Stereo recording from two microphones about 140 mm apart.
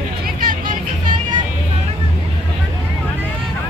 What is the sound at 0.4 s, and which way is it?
Music, 75° right (ahead or behind).